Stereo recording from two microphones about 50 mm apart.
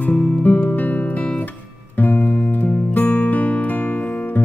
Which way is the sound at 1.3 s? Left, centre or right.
Left.